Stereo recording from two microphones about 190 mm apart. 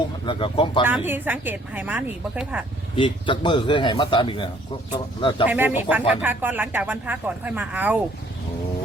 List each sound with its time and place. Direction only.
0.3 s a man's voice: 25° left (ahead or behind)
0.9 s speech: 10° right (ahead or behind)
2.9 s a man's voice: 25° left (ahead or behind)
5.5 s speech: 10° right (ahead or behind)